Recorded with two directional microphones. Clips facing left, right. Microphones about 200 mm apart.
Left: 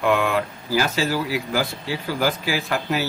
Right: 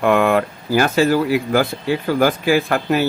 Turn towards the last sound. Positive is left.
turn(degrees=-55)  # may be behind; listen again after turning